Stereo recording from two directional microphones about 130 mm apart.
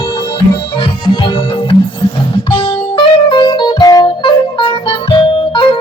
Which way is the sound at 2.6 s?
40° left (ahead or behind).